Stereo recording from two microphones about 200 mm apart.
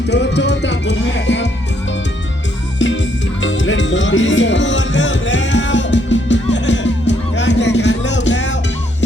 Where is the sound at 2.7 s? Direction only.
65° left (ahead or behind).